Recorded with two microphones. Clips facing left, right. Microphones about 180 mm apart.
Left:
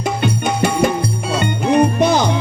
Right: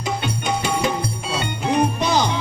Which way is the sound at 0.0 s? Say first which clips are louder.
Left 6 dB; 55° left (ahead or behind).